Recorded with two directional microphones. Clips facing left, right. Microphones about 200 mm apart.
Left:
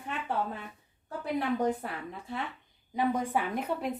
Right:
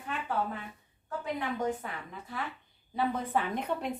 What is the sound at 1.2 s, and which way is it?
A woman's voice, 35° left (ahead or behind).